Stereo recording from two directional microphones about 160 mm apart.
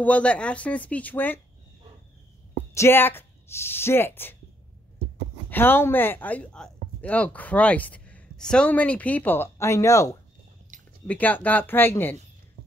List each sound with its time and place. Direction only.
0.0 s speech: 10° left (ahead or behind)
2.5 s a woman's voice: 15° left (ahead or behind)
5.5 s speech: 15° left (ahead or behind)
10.7 s a sound: 50° right (ahead or behind)
11.1 s speech: 10° left (ahead or behind)